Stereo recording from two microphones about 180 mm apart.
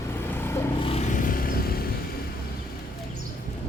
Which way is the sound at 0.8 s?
40° left (ahead or behind).